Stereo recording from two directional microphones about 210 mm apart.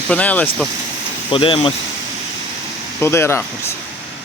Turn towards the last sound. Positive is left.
turn(degrees=10)  # may be behind; listen again after turning